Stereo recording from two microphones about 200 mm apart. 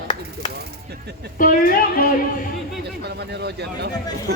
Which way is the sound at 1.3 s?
45° left (ahead or behind).